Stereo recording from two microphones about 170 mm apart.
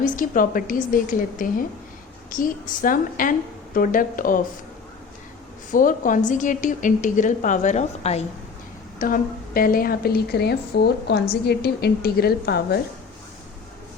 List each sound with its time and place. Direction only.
0.0 s a woman's voice: 55° left (ahead or behind)
5.7 s a woman's voice: 50° left (ahead or behind)
9.0 s a woman's voice: 55° left (ahead or behind); by 12.8 s 70° left (ahead or behind)